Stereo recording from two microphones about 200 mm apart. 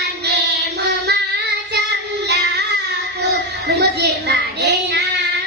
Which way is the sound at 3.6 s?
55° right (ahead or behind).